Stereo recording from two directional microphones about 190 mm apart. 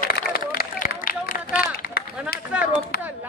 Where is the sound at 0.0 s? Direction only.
55° left (ahead or behind).